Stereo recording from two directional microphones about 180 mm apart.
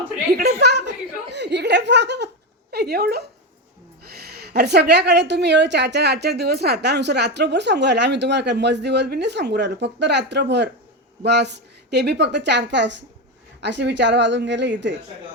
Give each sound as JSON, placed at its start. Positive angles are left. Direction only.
{"t": 0.3, "sound": "a woman's voice", "side_deg": -65}